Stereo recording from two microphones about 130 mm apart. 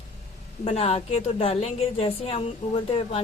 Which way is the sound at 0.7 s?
50° left (ahead or behind).